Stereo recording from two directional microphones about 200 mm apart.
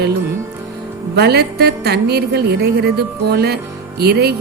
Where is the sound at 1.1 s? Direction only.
55° right (ahead or behind).